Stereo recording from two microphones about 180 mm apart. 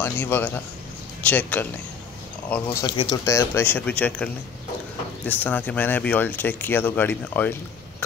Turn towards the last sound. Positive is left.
turn(degrees=10)  # may be behind; listen again after turning